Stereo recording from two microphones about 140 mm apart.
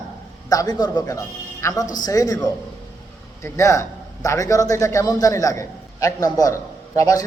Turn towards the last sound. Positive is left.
turn(degrees=25)  # may be behind; listen again after turning